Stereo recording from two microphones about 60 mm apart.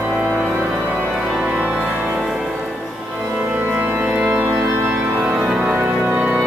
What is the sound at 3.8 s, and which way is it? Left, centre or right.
Organ, right.